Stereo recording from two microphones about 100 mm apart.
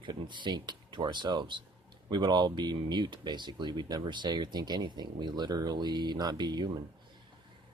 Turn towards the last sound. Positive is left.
turn(degrees=-45)  # may be behind; listen again after turning